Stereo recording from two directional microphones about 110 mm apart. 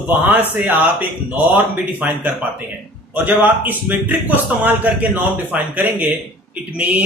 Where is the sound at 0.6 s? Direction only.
15° right (ahead or behind).